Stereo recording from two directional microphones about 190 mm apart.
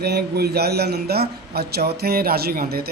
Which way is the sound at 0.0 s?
60° right (ahead or behind).